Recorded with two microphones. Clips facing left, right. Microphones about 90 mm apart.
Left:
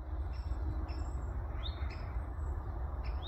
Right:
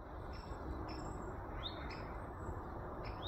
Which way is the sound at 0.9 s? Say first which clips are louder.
Right 2 dB; 15° right (ahead or behind).